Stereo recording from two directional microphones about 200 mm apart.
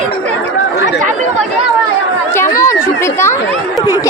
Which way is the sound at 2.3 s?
15° left (ahead or behind).